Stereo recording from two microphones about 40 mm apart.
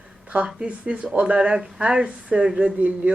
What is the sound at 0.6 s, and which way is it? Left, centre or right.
Speech, right.